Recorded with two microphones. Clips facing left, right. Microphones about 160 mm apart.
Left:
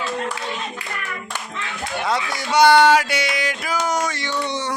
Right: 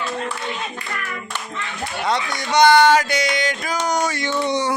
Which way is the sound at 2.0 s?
5° left (ahead or behind).